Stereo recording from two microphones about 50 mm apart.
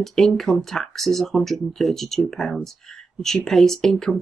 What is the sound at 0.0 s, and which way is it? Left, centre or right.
Speech, centre.